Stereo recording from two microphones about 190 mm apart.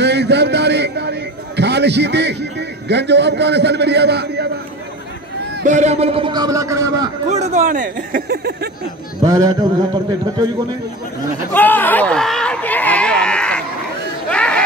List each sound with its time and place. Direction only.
0.0 s a sound: 65° right (ahead or behind)
1.6 s a man's voice: 65° right (ahead or behind)
5.6 s a man's voice: 40° right (ahead or behind); by 7.1 s 15° right (ahead or behind)
7.2 s speech: 35° right (ahead or behind)
9.2 s a man's voice: 20° right (ahead or behind)
11.5 s a sound: 10° left (ahead or behind)
14.3 s chatter: 5° left (ahead or behind)